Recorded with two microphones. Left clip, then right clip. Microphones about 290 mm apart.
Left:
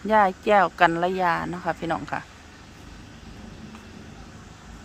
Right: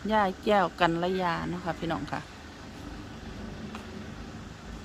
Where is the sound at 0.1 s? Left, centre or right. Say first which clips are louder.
Left 7 dB; centre.